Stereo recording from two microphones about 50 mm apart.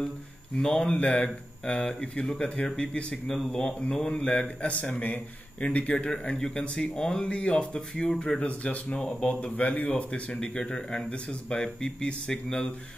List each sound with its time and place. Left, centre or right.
0.6 s speech: centre
3.3 s speech: centre